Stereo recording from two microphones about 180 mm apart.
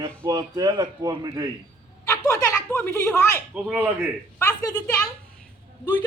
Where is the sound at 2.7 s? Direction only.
10° left (ahead or behind).